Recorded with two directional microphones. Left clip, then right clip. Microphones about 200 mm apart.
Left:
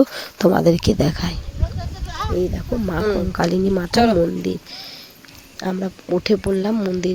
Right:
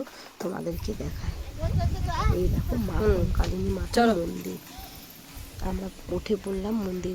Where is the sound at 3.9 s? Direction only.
Centre (ahead or behind).